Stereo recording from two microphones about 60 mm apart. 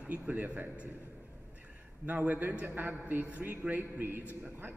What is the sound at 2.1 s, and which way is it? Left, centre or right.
A man's voice, right.